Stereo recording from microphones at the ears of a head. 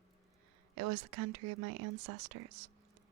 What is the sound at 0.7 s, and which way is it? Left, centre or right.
Speech, right.